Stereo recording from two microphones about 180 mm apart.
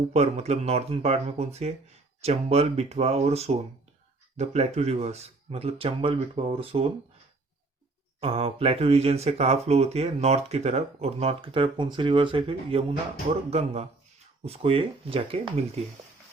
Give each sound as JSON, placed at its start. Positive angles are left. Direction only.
{"t": 0.1, "sound": "speech", "side_deg": -35}
{"t": 8.2, "sound": "speech", "side_deg": -30}